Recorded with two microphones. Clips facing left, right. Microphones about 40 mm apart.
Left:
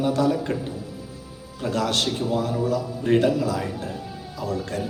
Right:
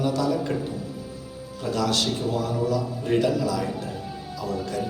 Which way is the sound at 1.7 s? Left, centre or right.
Left.